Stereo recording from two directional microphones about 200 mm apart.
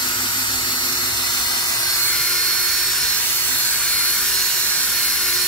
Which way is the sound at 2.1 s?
5° left (ahead or behind).